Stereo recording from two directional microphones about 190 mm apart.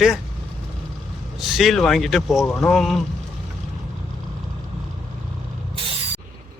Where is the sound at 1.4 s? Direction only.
Centre (ahead or behind).